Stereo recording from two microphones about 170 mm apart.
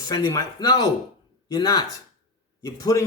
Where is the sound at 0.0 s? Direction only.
25° left (ahead or behind).